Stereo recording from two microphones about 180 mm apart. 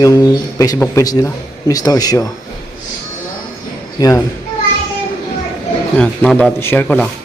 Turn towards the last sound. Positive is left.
turn(degrees=10)  # may be behind; listen again after turning